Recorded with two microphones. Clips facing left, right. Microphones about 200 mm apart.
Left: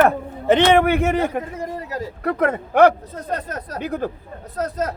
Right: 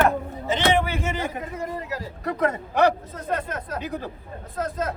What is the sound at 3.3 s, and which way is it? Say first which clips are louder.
A man's voice: even; 40° left (ahead or behind).